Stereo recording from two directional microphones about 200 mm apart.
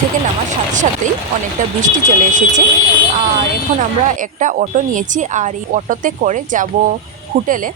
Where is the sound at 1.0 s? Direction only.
40° right (ahead or behind).